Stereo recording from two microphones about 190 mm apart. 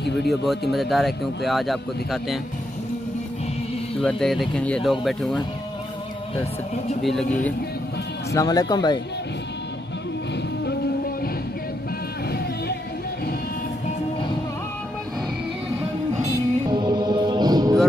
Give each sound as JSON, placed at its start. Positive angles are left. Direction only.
{"t": 0.3, "sound": "speech", "side_deg": 0}
{"t": 4.0, "sound": "speech", "side_deg": 0}
{"t": 6.3, "sound": "speech", "side_deg": 35}
{"t": 7.0, "sound": "speech", "side_deg": 0}
{"t": 8.3, "sound": "speech", "side_deg": 20}
{"t": 16.2, "sound": "music", "side_deg": -20}